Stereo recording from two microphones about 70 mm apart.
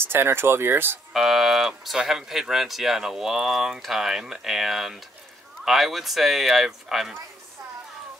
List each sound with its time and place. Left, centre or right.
0.0 s speech: right
1.1 s speech: centre